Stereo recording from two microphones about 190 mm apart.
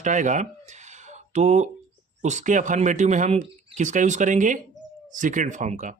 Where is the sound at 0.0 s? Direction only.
40° right (ahead or behind).